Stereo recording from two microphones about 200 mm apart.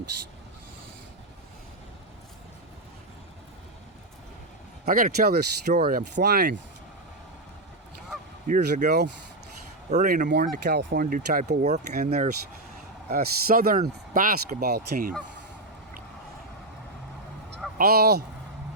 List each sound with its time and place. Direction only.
4.9 s speech: 45° right (ahead or behind)
8.4 s speech: 40° right (ahead or behind)
9.9 s speech: 40° right (ahead or behind)
10.2 s speech: 55° right (ahead or behind)
11.6 s speech: 35° right (ahead or behind)
13.1 s speech: 50° right (ahead or behind)
17.7 s speech: 50° right (ahead or behind)